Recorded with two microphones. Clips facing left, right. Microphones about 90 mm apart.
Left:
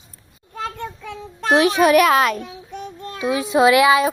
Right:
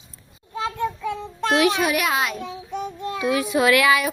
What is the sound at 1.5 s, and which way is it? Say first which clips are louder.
Speech: left 4 dB; 35° left (ahead or behind).